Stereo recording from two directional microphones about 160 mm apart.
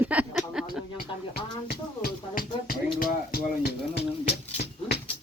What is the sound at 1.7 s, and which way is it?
Music, 70° left (ahead or behind).